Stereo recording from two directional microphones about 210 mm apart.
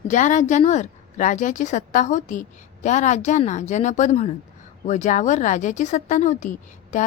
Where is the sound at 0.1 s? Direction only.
35° left (ahead or behind).